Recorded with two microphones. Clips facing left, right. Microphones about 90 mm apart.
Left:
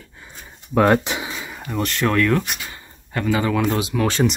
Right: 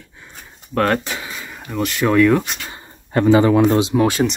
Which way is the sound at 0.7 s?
10° left (ahead or behind).